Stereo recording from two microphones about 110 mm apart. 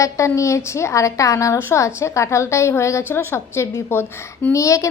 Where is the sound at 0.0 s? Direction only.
30° left (ahead or behind).